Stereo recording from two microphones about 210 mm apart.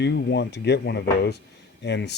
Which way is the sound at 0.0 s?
55° left (ahead or behind).